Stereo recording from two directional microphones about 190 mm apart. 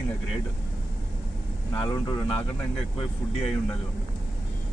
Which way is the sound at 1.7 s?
20° left (ahead or behind).